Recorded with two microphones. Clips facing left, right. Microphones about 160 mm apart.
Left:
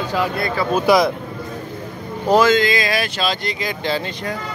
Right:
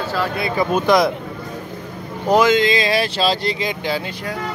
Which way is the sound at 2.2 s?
15° right (ahead or behind).